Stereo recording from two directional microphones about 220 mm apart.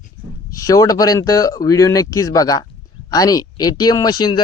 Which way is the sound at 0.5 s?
15° left (ahead or behind).